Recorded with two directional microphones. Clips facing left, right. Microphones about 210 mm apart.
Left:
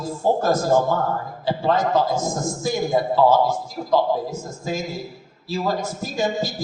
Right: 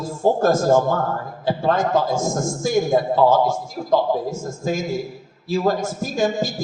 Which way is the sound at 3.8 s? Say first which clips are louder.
Right 1 dB; 50° right (ahead or behind).